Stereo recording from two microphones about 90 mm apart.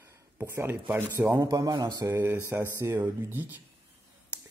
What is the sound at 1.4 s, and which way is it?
A man's voice, 40° right (ahead or behind).